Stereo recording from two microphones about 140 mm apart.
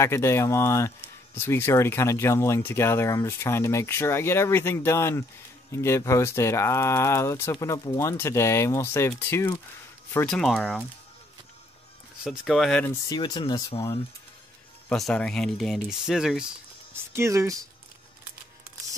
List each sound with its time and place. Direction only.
0.0 s speech: 20° left (ahead or behind)
10.2 s speech: centre (ahead or behind)
12.2 s speech: centre (ahead or behind)
13.1 s speech: 30° left (ahead or behind)
14.9 s speech: 5° left (ahead or behind)
16.9 s speech: 20° right (ahead or behind)